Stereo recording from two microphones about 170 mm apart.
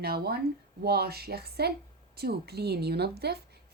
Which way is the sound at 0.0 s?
65° right (ahead or behind).